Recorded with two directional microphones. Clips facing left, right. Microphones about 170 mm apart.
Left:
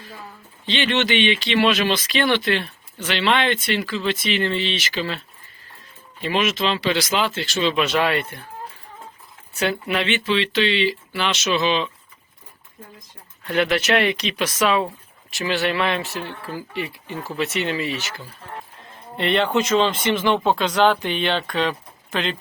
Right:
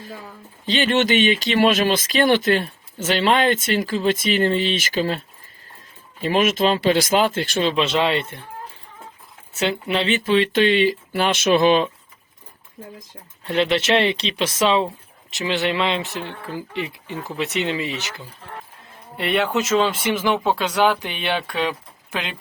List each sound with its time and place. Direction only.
0.6 s speech: 40° right (ahead or behind)
6.2 s speech: 45° right (ahead or behind)
7.8 s speech: 25° right (ahead or behind)
9.6 s speech: 25° right (ahead or behind); by 11.9 s 50° right (ahead or behind)
13.4 s speech: 25° right (ahead or behind)
19.1 s speech: 5° right (ahead or behind)